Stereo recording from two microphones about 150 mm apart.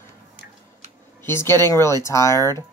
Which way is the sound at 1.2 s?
15° left (ahead or behind).